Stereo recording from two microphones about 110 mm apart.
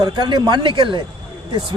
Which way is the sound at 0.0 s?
40° right (ahead or behind).